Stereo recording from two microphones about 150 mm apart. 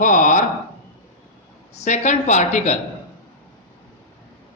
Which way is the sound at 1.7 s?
50° left (ahead or behind).